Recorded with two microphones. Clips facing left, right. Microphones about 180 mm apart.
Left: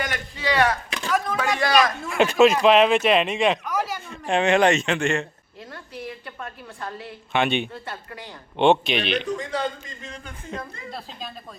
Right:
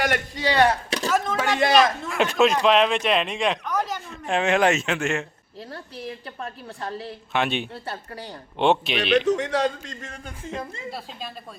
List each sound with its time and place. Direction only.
0.4 s a sound: 30° right (ahead or behind)
1.4 s a sound: 25° right (ahead or behind)
2.0 s speech: centre (ahead or behind)
5.7 s a woman's voice: 30° right (ahead or behind)
7.3 s speech: centre (ahead or behind)
7.7 s a woman's voice: 35° right (ahead or behind)
8.5 s speech: centre (ahead or behind)
9.2 s a man's voice: 75° right (ahead or behind)